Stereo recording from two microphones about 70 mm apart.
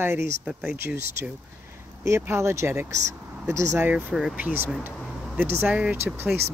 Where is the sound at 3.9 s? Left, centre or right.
Right.